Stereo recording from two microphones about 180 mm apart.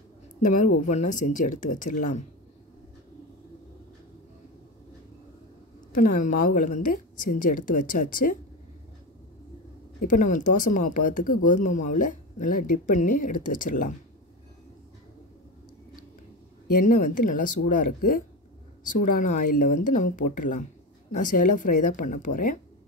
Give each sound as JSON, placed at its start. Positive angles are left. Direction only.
{"t": 0.4, "sound": "speech", "side_deg": 40}
{"t": 5.9, "sound": "speech", "side_deg": 45}
{"t": 10.1, "sound": "speech", "side_deg": 45}
{"t": 16.8, "sound": "speech", "side_deg": 45}